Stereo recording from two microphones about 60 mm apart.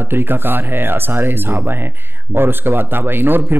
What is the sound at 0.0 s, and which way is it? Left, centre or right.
Speech, right.